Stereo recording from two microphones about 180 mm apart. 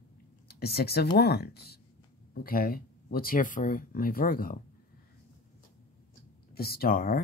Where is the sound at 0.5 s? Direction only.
60° left (ahead or behind).